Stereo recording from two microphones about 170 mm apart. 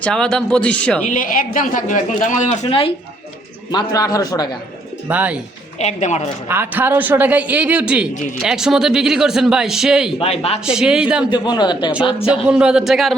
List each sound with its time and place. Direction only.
0.0 s a man's voice: 5° left (ahead or behind)
1.0 s speech: 50° left (ahead or behind); by 2.9 s 35° left (ahead or behind)
3.7 s a man's voice: 25° left (ahead or behind)
5.0 s a man's voice: 10° right (ahead or behind)
5.8 s speech: 40° left (ahead or behind)
6.5 s a man's voice: 10° right (ahead or behind)
10.2 s a man's voice: 35° left (ahead or behind)
10.7 s a man's voice: 5° right (ahead or behind)
11.3 s a man's voice: 25° left (ahead or behind)
12.5 s a man's voice: 5° right (ahead or behind)